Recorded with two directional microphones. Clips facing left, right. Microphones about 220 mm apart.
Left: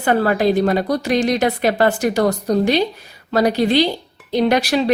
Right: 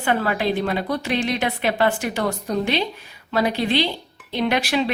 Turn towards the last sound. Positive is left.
turn(degrees=40)  # may be behind; listen again after turning